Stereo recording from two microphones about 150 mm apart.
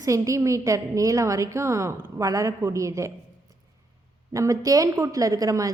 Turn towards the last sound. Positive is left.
turn(degrees=-25)  # may be behind; listen again after turning